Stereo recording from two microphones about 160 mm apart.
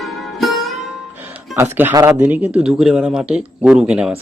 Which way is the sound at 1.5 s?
15° right (ahead or behind).